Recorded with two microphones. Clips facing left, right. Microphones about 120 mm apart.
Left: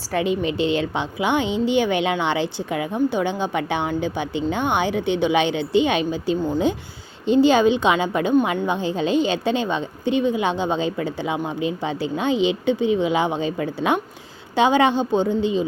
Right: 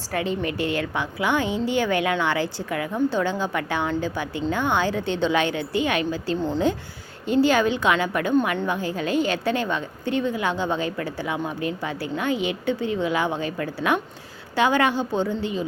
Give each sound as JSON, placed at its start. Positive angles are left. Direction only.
{"t": 0.1, "sound": "a woman's voice", "side_deg": 20}